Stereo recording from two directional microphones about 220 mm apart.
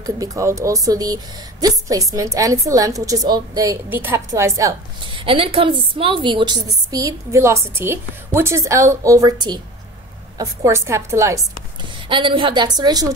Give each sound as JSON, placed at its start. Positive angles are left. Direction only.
{"t": 0.0, "sound": "a woman's voice", "side_deg": -15}